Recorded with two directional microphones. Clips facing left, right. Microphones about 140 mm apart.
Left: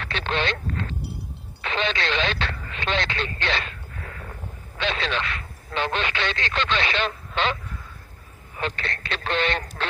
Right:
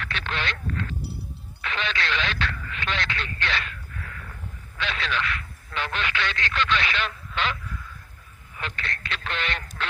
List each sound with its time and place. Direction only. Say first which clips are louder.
0.0 s a sound: left 5 dB; 30° left (ahead or behind)
1.6 s radio: left 4 dB; 30° left (ahead or behind)
8.5 s speech: left 5 dB; 30° left (ahead or behind)